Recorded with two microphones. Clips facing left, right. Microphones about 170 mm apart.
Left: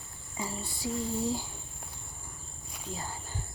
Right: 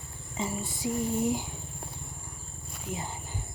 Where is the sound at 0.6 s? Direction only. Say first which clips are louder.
Right 2 dB; 20° right (ahead or behind).